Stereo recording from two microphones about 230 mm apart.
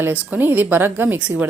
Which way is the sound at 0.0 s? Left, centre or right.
Centre.